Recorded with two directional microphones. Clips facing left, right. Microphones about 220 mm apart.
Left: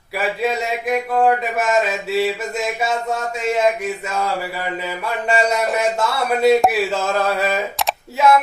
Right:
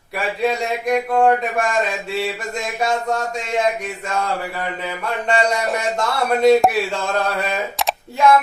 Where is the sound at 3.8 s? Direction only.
5° left (ahead or behind).